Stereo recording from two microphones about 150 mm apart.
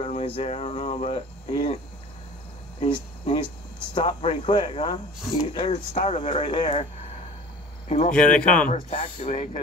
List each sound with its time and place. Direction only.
0.0 s speech: 40° left (ahead or behind)
2.8 s speech: 35° left (ahead or behind)
8.1 s speech: 5° left (ahead or behind)
8.6 s speech: 60° left (ahead or behind)